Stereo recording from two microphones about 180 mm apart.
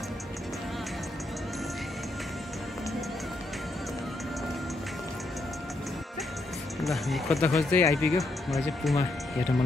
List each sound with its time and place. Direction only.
6.8 s speech: centre (ahead or behind)
7.3 s speech: 15° left (ahead or behind)
7.9 s speech: centre (ahead or behind)